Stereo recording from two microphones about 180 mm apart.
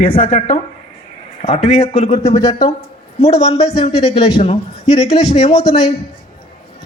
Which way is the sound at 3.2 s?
35° left (ahead or behind).